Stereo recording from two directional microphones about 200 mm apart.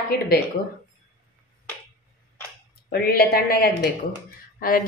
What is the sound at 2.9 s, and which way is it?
Speech, 50° left (ahead or behind).